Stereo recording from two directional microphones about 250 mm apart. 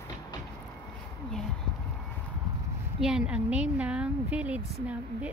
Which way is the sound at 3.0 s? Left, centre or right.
Centre.